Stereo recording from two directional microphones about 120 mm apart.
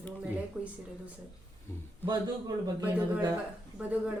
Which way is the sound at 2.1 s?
30° right (ahead or behind).